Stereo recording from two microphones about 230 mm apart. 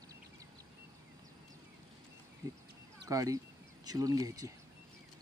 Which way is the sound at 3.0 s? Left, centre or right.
Centre.